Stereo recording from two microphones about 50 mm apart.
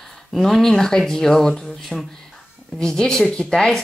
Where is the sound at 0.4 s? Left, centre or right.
Centre.